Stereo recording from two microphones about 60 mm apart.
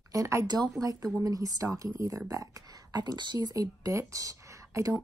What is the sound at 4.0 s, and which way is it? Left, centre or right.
Speech, right.